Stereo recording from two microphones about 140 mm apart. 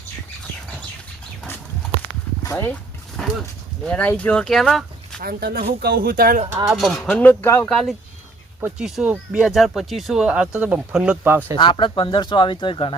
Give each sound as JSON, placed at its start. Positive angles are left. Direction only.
{"t": 2.4, "sound": "a sound", "side_deg": 20}
{"t": 3.2, "sound": "dog", "side_deg": 5}
{"t": 3.8, "sound": "speech", "side_deg": 10}
{"t": 5.2, "sound": "speech", "side_deg": -90}
{"t": 6.7, "sound": "speech", "side_deg": 0}
{"t": 7.7, "sound": "speech", "side_deg": 5}
{"t": 11.5, "sound": "speech", "side_deg": 35}